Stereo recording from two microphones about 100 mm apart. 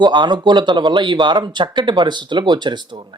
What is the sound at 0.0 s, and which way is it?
A man's voice, 50° right (ahead or behind).